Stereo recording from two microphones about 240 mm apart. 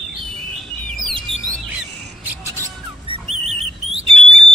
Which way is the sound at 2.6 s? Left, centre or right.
Right.